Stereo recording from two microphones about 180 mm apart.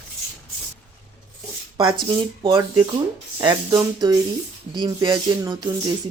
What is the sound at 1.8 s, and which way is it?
Speech, 25° right (ahead or behind).